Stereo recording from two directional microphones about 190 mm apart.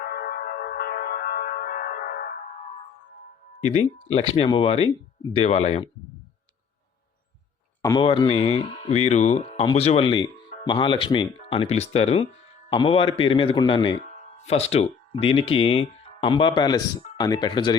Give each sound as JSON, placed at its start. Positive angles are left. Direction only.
{"t": 0.0, "sound": "music", "side_deg": 55}
{"t": 3.6, "sound": "speech", "side_deg": 35}
{"t": 7.8, "sound": "speech", "side_deg": 20}
{"t": 14.0, "sound": "speech", "side_deg": 40}